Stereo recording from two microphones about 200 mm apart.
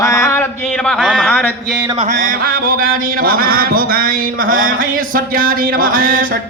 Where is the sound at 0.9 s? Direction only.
5° right (ahead or behind).